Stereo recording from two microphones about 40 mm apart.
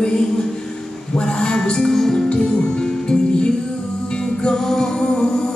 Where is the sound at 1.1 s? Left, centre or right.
Centre.